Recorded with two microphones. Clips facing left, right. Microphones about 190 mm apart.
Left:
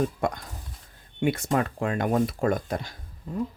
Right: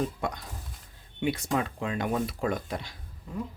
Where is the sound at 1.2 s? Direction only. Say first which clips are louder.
Left 4 dB; 50° left (ahead or behind).